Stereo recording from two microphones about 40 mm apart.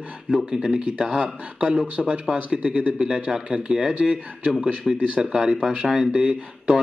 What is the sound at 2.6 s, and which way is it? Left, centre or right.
Speech, right.